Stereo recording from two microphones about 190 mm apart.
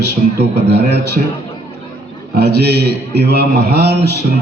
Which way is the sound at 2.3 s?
60° right (ahead or behind).